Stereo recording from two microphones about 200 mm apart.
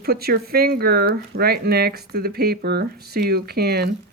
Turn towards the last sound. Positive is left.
turn(degrees=-55)  # may be behind; listen again after turning